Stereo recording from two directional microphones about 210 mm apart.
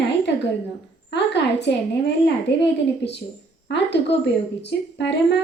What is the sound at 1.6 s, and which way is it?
Speech, 55° left (ahead or behind).